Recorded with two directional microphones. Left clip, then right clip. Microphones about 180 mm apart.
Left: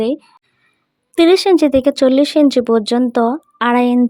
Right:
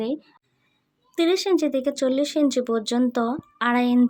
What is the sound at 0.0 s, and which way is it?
Speech, 45° left (ahead or behind).